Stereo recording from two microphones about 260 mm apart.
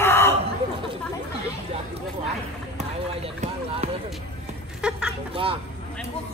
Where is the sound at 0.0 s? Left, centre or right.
Centre.